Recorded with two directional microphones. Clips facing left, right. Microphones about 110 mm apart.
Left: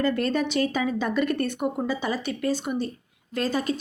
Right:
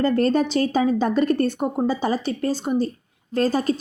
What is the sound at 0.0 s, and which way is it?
A woman's voice, 35° right (ahead or behind).